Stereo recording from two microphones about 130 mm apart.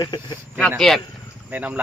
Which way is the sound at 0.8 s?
5° left (ahead or behind).